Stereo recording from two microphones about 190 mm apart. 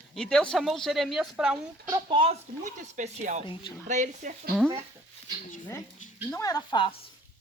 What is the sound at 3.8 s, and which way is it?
Speech, 40° right (ahead or behind).